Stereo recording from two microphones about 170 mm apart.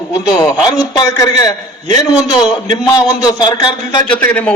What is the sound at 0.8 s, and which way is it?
A man's voice, 20° left (ahead or behind).